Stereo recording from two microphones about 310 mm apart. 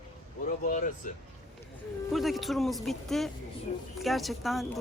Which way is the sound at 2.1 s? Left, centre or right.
Centre.